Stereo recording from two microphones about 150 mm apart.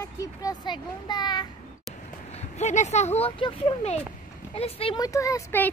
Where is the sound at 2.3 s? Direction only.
50° left (ahead or behind).